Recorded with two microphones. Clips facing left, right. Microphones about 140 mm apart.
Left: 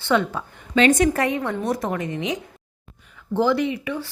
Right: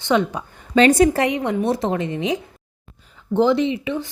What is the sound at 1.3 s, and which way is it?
A woman's voice, 20° right (ahead or behind).